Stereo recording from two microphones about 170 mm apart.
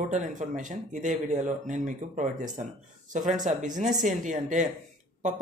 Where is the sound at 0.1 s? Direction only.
45° right (ahead or behind).